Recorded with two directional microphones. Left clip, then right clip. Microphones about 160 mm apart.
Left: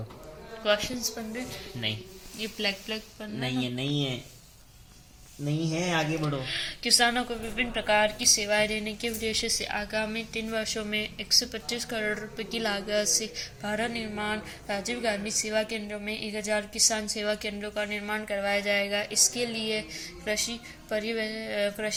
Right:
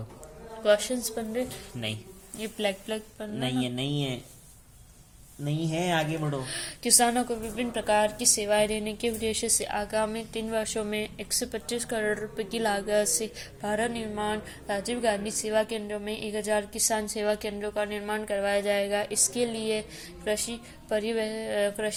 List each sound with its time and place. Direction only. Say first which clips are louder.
0.6 s a woman's voice: right 3 dB; 65° right (ahead or behind)
2.4 s a woman's voice: right 1 dB; 45° right (ahead or behind)
3.4 s speech: right 1 dB; 5° right (ahead or behind)
5.5 s speech: right 1 dB; centre (ahead or behind)
6.5 s a woman's voice: left 3 dB; 50° right (ahead or behind)
9.5 s a woman's voice: right 1 dB; 50° right (ahead or behind)